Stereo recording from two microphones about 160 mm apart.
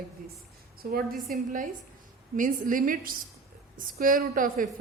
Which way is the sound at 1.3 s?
60° right (ahead or behind).